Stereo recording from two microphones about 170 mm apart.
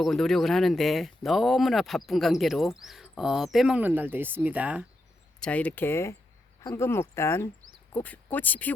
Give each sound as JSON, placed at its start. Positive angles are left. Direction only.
{"t": 0.0, "sound": "speech", "side_deg": 0}
{"t": 5.4, "sound": "speech", "side_deg": 5}